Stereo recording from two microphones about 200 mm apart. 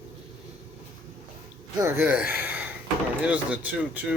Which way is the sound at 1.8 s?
10° right (ahead or behind).